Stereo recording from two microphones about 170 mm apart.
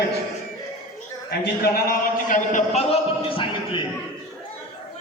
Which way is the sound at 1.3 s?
60° left (ahead or behind).